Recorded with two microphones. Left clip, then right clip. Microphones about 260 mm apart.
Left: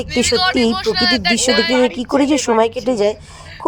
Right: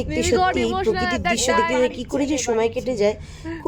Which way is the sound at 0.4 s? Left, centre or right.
Centre.